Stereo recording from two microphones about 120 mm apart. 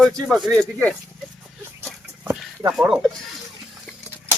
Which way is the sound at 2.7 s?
10° right (ahead or behind).